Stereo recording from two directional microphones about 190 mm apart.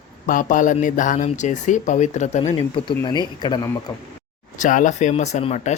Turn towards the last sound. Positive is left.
turn(degrees=40)  # may be behind; listen again after turning